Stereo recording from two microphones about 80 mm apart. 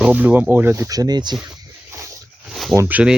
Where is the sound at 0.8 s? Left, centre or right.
Right.